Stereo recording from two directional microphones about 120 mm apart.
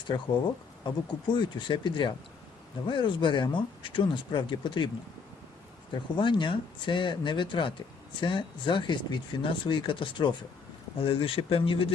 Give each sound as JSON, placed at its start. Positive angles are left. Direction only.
{"t": 0.1, "sound": "speech", "side_deg": 40}
{"t": 5.9, "sound": "speech", "side_deg": 40}